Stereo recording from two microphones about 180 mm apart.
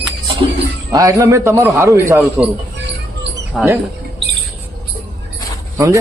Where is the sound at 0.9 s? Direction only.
20° right (ahead or behind).